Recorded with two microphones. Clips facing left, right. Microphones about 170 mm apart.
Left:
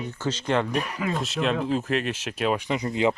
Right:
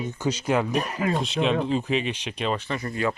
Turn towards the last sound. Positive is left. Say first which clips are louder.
# left 3 dB
turn(degrees=20)  # may be behind; listen again after turning